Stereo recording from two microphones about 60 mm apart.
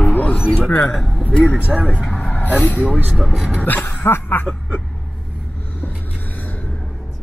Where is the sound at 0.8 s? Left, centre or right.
Centre.